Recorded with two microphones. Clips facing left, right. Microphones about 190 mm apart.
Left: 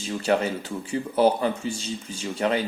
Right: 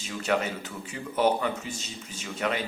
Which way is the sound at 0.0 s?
30° left (ahead or behind).